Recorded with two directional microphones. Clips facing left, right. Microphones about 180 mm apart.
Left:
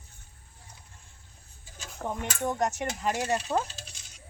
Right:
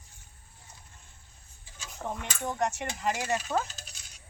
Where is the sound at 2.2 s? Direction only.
40° left (ahead or behind).